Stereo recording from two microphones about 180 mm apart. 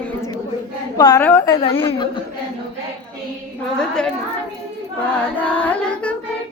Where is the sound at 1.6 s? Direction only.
30° left (ahead or behind).